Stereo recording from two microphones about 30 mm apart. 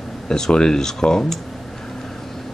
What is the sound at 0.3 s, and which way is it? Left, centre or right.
Speech, left.